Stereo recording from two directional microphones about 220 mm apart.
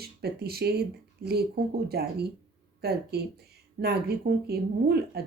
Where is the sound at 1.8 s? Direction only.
45° right (ahead or behind).